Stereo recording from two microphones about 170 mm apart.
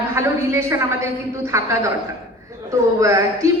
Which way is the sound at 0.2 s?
15° right (ahead or behind).